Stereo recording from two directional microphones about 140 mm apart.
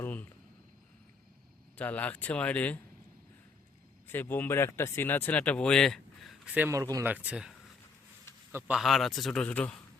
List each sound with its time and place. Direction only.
0.0 s a sound: 10° left (ahead or behind)
1.7 s speech: 10° left (ahead or behind)
4.0 s speech: 15° left (ahead or behind); by 6.7 s 5° right (ahead or behind)
6.7 s speech: 25° right (ahead or behind)
7.0 s speech: 10° right (ahead or behind)
8.7 s a man's voice: centre (ahead or behind)